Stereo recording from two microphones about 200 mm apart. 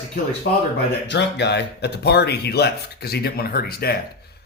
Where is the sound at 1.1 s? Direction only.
60° left (ahead or behind).